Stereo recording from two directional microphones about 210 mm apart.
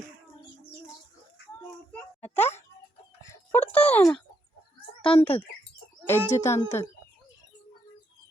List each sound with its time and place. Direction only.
3.2 s a sound: 10° left (ahead or behind)
5.0 s a child's voice: 25° left (ahead or behind)
6.1 s a child's voice: 15° left (ahead or behind)